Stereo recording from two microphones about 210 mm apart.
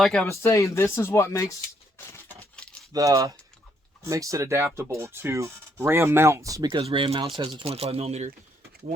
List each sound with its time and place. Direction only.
0.0 s speech: 5° left (ahead or behind)
2.0 s a sound: 10° left (ahead or behind)
2.9 s speech: 15° right (ahead or behind)